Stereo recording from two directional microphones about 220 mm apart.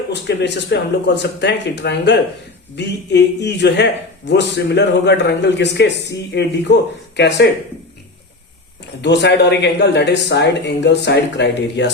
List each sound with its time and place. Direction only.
0.1 s speech: 50° left (ahead or behind)
9.0 s speech: 50° left (ahead or behind)